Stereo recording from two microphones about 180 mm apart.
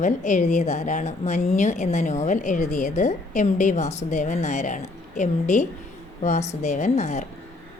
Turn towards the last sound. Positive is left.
turn(degrees=40)  # may be behind; listen again after turning